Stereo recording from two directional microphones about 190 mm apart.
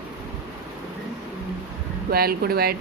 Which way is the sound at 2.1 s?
55° right (ahead or behind).